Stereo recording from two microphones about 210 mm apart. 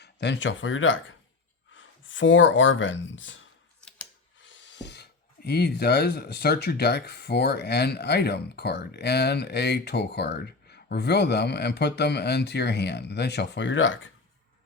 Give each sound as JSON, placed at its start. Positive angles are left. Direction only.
{"t": 0.0, "sound": "speech", "side_deg": 55}
{"t": 4.4, "sound": "speech", "side_deg": 60}